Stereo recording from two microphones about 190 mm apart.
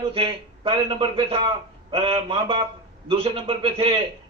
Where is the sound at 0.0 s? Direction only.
30° right (ahead or behind).